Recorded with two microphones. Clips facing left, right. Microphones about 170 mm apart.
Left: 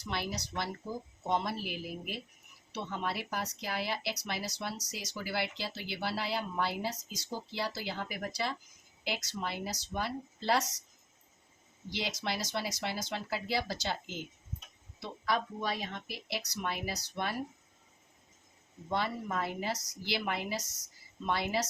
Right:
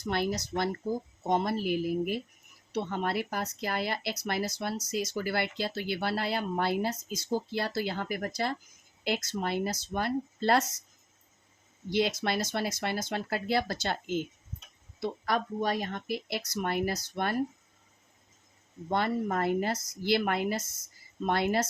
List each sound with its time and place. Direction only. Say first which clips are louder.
0.0 s speech: right 7 dB; 50° right (ahead or behind)
11.9 s speech: right 8 dB; 55° right (ahead or behind)
18.9 s speech: right 5 dB; 55° right (ahead or behind)